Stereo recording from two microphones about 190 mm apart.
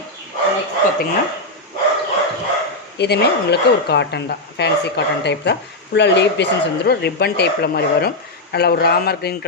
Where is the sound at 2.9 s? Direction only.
60° left (ahead or behind).